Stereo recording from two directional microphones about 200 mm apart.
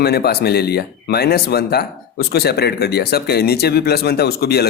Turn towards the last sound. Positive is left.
turn(degrees=50)  # may be behind; listen again after turning